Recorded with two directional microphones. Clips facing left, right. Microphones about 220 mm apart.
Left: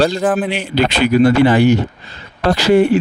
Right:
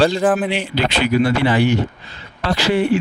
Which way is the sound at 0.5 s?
45° left (ahead or behind).